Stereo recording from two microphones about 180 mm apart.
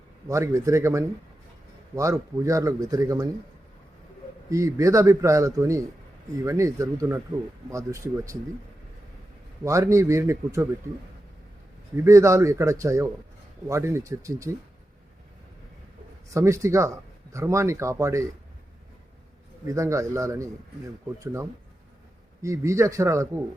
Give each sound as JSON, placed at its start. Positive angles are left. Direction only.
{"t": 0.3, "sound": "speech", "side_deg": -15}
{"t": 4.4, "sound": "speech", "side_deg": -15}
{"t": 9.6, "sound": "speech", "side_deg": -15}
{"t": 12.0, "sound": "speech", "side_deg": -15}
{"t": 16.3, "sound": "speech", "side_deg": -15}
{"t": 19.6, "sound": "speech", "side_deg": -15}
{"t": 22.4, "sound": "speech", "side_deg": -15}